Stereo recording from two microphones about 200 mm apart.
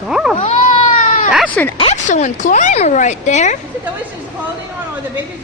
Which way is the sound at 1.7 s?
30° left (ahead or behind).